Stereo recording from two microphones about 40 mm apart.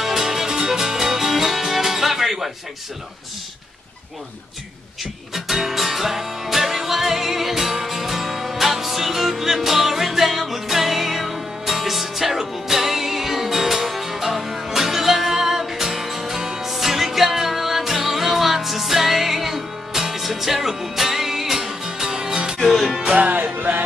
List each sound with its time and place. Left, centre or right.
0.0 s music: centre
5.3 s music: centre
23.1 s music: right